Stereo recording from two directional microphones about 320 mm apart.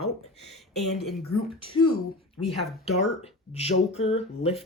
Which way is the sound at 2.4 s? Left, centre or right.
Centre.